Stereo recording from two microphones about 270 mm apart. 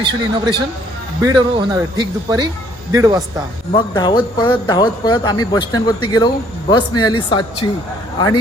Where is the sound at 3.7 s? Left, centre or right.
Centre.